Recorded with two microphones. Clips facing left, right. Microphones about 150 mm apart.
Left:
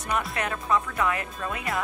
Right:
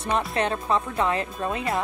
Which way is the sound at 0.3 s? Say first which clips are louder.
Right 3 dB; 30° right (ahead or behind).